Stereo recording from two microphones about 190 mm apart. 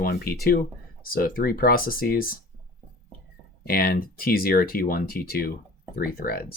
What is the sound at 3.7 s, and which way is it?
Speech, 50° left (ahead or behind).